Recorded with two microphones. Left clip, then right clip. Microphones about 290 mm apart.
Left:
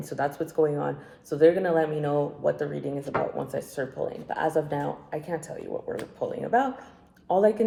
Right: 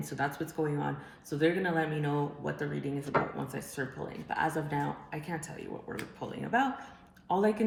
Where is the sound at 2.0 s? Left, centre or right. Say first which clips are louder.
Left 7 dB; centre.